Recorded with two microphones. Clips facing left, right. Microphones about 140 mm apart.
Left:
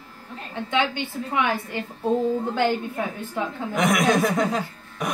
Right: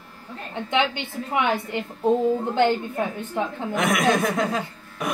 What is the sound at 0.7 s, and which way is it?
A woman's voice, 20° right (ahead or behind).